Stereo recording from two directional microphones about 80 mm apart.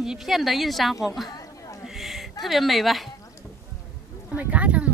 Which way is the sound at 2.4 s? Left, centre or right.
Centre.